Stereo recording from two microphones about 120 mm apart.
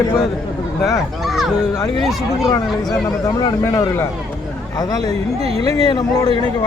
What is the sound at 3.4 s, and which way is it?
Speech, 30° left (ahead or behind).